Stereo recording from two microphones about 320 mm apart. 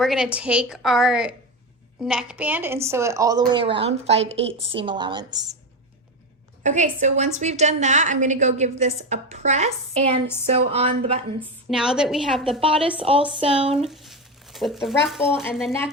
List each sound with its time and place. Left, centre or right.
0.0 s a woman's voice: centre
6.6 s a woman's voice: right
11.3 s a woman's voice: centre
12.5 s a woman's voice: centre
13.9 s a sound: centre
15.0 s a woman's voice: centre